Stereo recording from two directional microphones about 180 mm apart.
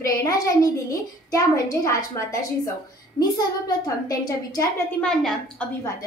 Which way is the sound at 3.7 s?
20° left (ahead or behind).